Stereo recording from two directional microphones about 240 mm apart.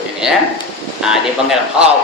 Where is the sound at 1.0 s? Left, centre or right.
Centre.